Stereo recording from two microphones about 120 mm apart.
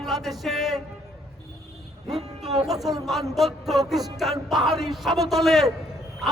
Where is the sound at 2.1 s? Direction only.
60° right (ahead or behind).